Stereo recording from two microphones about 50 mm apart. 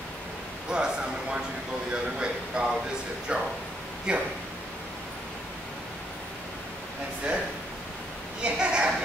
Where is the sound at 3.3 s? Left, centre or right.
Right.